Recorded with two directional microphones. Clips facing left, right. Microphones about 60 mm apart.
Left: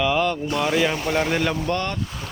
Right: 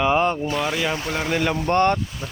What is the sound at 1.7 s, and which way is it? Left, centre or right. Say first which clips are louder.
Speech: right 7 dB; right.